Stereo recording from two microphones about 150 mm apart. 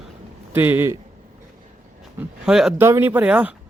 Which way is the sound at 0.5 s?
15° right (ahead or behind).